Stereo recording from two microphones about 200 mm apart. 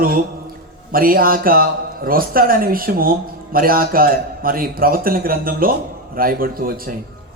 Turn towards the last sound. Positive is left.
turn(degrees=-45)  # may be behind; listen again after turning